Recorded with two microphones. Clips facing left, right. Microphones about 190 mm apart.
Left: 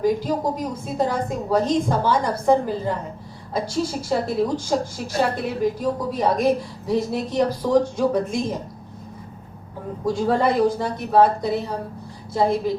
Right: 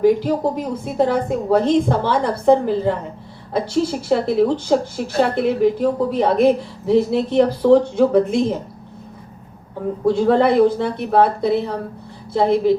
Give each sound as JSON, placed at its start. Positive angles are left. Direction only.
{"t": 0.0, "sound": "a woman's voice", "side_deg": -60}
{"t": 10.1, "sound": "a woman's voice", "side_deg": -65}